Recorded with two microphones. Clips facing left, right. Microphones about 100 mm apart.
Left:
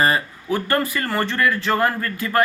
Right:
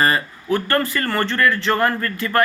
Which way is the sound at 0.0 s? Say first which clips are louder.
Even; 15° left (ahead or behind).